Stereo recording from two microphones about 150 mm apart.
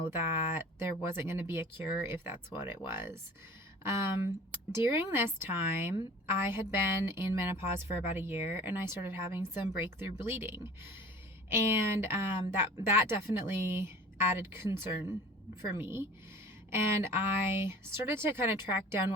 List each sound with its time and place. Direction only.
0.1 s speech: 15° right (ahead or behind)
15.8 s speech: 15° right (ahead or behind)